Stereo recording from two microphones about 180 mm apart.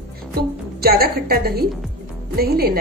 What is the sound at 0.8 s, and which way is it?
A woman's voice, 60° right (ahead or behind).